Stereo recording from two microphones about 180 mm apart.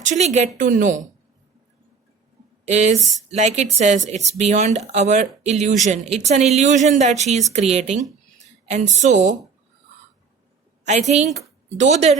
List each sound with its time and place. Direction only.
0.0 s speech: 40° right (ahead or behind)
2.6 s speech: 40° right (ahead or behind)
10.8 s speech: 40° right (ahead or behind)